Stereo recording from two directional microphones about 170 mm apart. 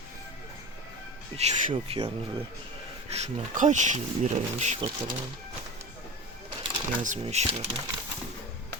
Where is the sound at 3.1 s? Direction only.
45° right (ahead or behind).